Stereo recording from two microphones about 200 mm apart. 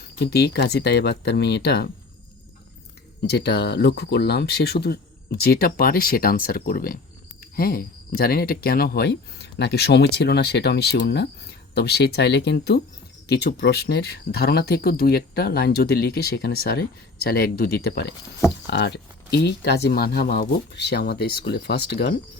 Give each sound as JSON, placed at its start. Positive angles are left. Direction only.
{"t": 0.2, "sound": "speech", "side_deg": 55}
{"t": 3.2, "sound": "speech", "side_deg": 55}